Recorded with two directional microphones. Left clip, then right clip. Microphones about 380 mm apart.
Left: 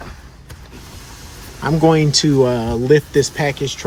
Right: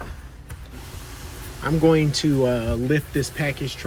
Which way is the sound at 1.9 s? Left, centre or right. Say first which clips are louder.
Left 6 dB; centre.